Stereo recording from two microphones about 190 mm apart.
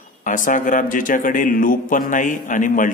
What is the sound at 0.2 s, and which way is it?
Speech, 45° left (ahead or behind).